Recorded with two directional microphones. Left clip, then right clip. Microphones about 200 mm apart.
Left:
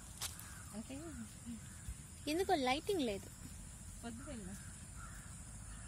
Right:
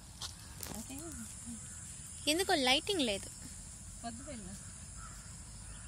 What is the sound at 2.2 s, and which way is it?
Speech, 10° right (ahead or behind).